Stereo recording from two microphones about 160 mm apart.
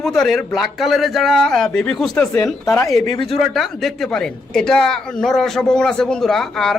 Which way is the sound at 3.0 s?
25° left (ahead or behind).